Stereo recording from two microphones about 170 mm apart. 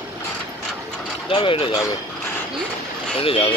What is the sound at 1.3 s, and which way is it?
Speech, 30° left (ahead or behind).